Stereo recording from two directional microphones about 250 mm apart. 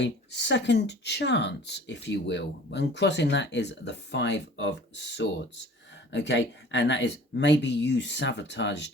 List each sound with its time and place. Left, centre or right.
0.0 s speech: left